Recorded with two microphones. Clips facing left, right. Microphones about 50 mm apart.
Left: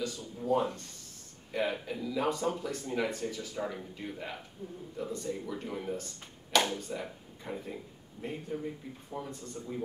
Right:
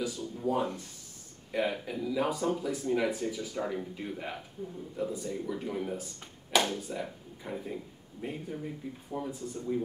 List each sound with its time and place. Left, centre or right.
0.0 s a sound: centre
1.5 s speech: centre
4.6 s speech: right
4.9 s speech: centre